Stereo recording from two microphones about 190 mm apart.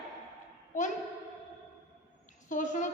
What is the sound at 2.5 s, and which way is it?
Speech, 40° left (ahead or behind).